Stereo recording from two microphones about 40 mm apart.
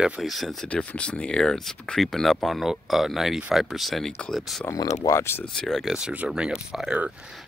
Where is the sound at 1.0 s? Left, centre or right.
Left.